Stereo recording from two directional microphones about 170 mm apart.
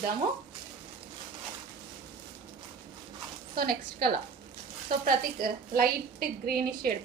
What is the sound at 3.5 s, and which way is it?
A woman's voice, 60° right (ahead or behind).